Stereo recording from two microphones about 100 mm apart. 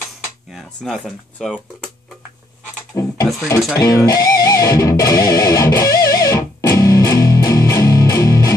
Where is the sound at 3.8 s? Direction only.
40° left (ahead or behind).